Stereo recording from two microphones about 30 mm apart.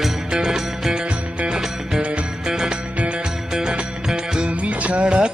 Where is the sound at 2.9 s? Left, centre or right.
Right.